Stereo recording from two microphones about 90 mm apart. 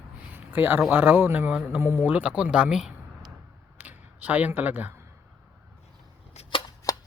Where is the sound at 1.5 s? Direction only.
15° right (ahead or behind).